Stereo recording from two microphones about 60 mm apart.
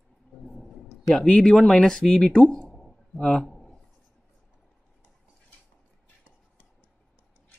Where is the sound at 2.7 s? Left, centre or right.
Centre.